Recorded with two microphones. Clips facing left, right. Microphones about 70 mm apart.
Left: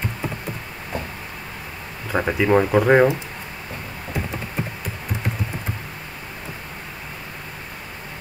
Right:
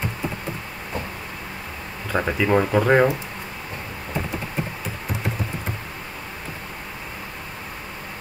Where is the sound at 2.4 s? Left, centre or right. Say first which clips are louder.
Left 3 dB; centre.